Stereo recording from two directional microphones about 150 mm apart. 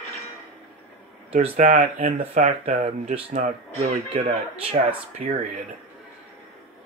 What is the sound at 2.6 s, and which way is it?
Speech, 70° right (ahead or behind).